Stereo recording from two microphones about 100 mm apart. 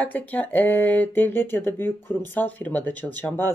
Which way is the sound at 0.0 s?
15° left (ahead or behind).